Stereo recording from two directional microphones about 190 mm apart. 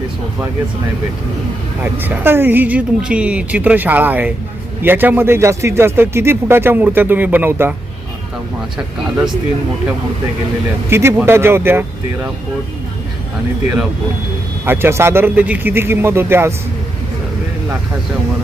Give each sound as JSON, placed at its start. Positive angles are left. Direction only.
{"t": 1.8, "sound": "speech", "side_deg": -10}
{"t": 10.8, "sound": "speech", "side_deg": -10}
{"t": 14.6, "sound": "speech", "side_deg": -10}